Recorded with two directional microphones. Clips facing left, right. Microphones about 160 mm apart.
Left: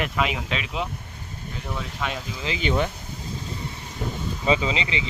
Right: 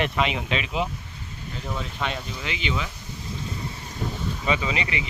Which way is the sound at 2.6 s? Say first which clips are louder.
Left 7 dB; 50° left (ahead or behind).